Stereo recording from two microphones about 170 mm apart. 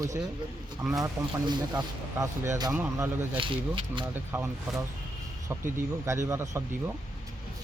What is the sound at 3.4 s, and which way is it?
Speech, 30° right (ahead or behind).